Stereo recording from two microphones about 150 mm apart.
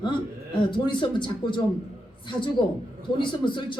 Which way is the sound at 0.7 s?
30° left (ahead or behind).